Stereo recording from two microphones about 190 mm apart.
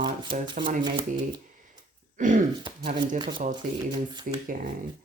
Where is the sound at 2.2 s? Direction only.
45° right (ahead or behind).